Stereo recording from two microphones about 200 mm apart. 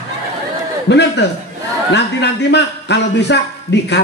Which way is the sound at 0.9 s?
60° left (ahead or behind).